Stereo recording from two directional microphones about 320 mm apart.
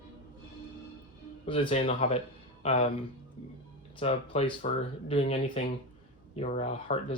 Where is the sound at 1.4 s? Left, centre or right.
Centre.